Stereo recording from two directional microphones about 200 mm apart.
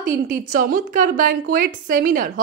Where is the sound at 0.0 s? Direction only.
45° right (ahead or behind).